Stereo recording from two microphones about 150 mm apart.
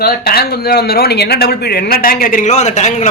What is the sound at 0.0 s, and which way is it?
Speech, 90° left.